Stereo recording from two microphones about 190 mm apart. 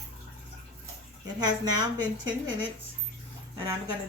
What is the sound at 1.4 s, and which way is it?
Speech, 20° right (ahead or behind).